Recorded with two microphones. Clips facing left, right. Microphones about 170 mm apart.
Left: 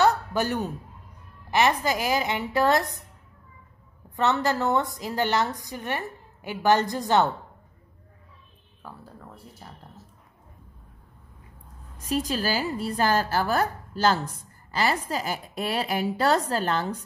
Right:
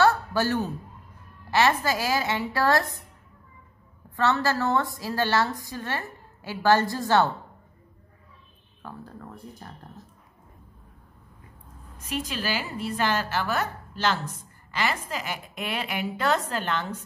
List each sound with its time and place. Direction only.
0.0 s a sound: 20° left (ahead or behind)
1.5 s a woman's voice: 15° left (ahead or behind)
4.2 s a woman's voice: 20° left (ahead or behind)
8.8 s a woman's voice: 5° left (ahead or behind)
12.0 s a woman's voice: 35° left (ahead or behind)